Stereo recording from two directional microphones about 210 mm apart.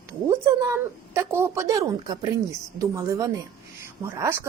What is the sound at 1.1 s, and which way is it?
Speech, 15° right (ahead or behind).